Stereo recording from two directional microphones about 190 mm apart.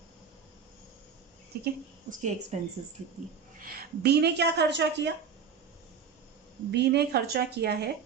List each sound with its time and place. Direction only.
1.6 s a woman's voice: 40° right (ahead or behind)
3.6 s a woman's voice: 50° right (ahead or behind)
6.7 s a woman's voice: 60° right (ahead or behind)